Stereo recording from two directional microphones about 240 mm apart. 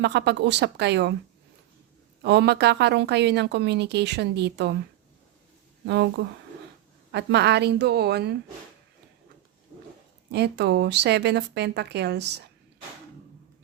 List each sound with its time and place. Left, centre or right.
0.0 s a woman's voice: right
2.2 s a woman's voice: right
5.8 s a woman's voice: right
10.3 s a woman's voice: right